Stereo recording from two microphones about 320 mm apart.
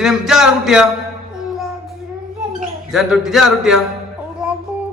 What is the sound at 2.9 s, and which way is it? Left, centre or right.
Speech, centre.